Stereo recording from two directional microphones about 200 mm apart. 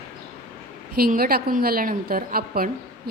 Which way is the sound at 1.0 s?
50° right (ahead or behind).